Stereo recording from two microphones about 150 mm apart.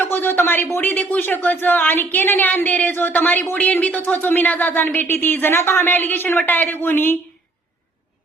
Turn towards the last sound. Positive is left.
turn(degrees=15)  # may be behind; listen again after turning